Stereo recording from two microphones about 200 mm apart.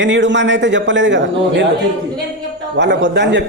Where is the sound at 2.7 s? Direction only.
60° right (ahead or behind).